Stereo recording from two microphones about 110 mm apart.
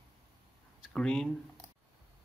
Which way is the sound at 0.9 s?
5° left (ahead or behind).